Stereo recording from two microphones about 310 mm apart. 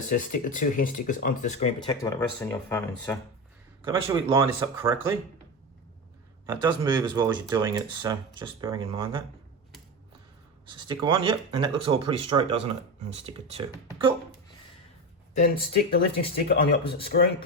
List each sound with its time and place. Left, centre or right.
0.1 s speech: left; by 3.2 s centre
3.8 s speech: centre
6.4 s speech: centre
10.7 s speech: centre
15.4 s speech: left